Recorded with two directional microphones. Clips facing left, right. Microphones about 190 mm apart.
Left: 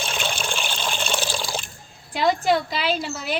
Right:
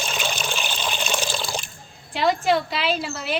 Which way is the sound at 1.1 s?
10° left (ahead or behind).